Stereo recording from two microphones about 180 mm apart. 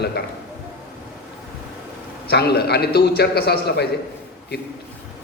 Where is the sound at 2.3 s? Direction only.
65° left (ahead or behind).